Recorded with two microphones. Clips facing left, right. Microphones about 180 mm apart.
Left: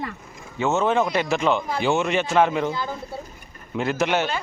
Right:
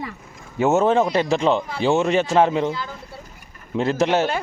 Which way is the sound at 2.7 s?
45° left (ahead or behind).